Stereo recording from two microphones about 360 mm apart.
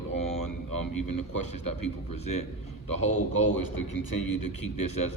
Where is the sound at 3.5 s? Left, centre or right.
Left.